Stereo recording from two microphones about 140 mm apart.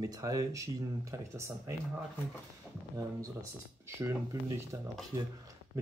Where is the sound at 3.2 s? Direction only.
20° right (ahead or behind).